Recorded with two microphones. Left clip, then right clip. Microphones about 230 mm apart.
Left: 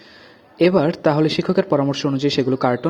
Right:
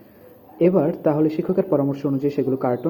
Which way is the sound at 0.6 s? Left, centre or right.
Left.